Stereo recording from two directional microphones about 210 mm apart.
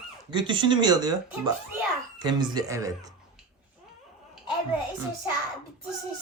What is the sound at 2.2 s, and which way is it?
Speech, 20° right (ahead or behind).